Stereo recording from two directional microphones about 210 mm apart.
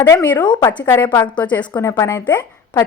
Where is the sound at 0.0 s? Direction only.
10° left (ahead or behind).